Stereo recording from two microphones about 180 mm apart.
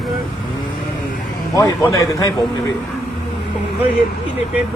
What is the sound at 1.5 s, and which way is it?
Speech, 20° left (ahead or behind).